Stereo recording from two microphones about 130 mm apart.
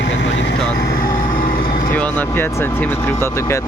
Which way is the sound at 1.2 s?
90° left.